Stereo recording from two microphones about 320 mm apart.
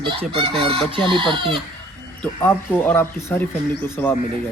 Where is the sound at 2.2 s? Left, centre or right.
Centre.